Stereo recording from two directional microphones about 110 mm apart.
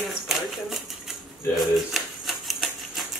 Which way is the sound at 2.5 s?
Centre (ahead or behind).